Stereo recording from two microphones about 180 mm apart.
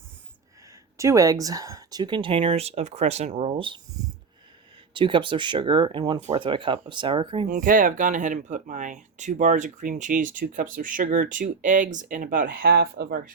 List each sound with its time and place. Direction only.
0.9 s speech: 15° right (ahead or behind)
4.9 s speech: 25° right (ahead or behind)
6.1 s speech: 40° right (ahead or behind)
7.4 s speech: 50° right (ahead or behind)